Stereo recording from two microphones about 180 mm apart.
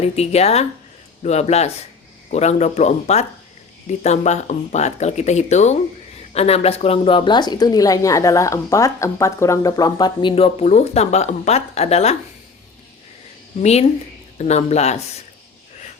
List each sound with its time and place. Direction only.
0.0 s speech: 35° left (ahead or behind)
13.6 s speech: 35° left (ahead or behind)